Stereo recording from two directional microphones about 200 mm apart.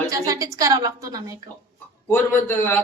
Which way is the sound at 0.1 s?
15° right (ahead or behind).